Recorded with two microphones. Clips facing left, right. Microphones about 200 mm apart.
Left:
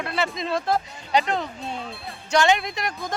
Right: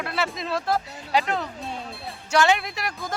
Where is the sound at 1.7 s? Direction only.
5° right (ahead or behind).